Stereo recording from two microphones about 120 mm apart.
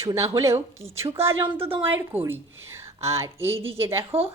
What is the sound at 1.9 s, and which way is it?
Speech, 20° right (ahead or behind).